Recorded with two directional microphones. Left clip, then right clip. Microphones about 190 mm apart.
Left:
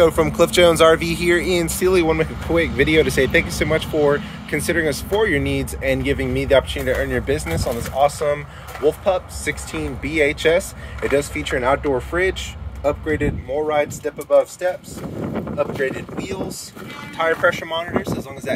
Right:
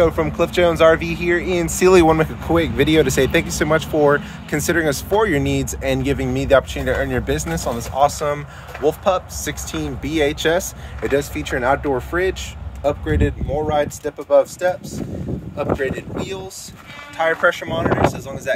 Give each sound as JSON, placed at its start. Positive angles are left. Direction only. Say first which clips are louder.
{"t": 0.0, "sound": "speech", "louder": "left 2 dB", "side_deg": 5}
{"t": 1.8, "sound": "speech", "louder": "right 6 dB", "side_deg": -35}
{"t": 2.1, "sound": "speech", "louder": "right 1 dB", "side_deg": -15}